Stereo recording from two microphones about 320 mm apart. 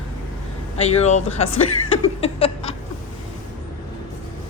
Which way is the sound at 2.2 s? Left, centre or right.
Centre.